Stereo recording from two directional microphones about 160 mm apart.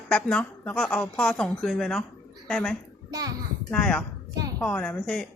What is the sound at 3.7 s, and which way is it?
Speech, 5° left (ahead or behind).